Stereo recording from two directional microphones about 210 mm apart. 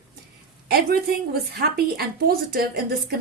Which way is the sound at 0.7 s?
45° right (ahead or behind).